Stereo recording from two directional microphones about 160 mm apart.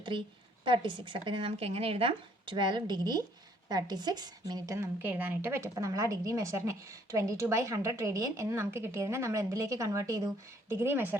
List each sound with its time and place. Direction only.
0.1 s speech: 30° right (ahead or behind); by 11.2 s 10° right (ahead or behind)